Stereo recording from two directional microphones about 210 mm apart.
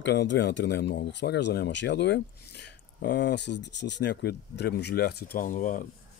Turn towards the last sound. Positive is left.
turn(degrees=40)  # may be behind; listen again after turning